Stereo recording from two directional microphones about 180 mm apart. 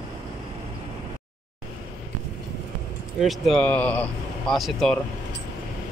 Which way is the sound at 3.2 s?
Centre (ahead or behind).